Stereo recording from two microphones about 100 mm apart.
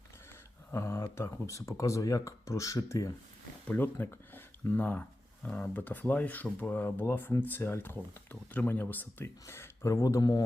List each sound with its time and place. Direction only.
0.7 s speech: 25° left (ahead or behind)
3.7 s speech: 20° left (ahead or behind); by 10.4 s 40° left (ahead or behind)